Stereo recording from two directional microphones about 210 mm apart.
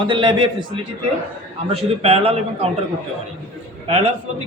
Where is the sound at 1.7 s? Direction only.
25° right (ahead or behind).